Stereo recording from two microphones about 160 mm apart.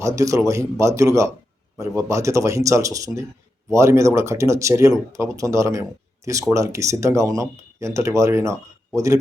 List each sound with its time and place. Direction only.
0.0 s speech: 20° right (ahead or behind)